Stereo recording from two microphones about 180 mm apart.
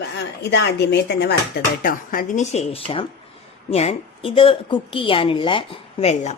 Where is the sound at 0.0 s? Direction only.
75° left (ahead or behind).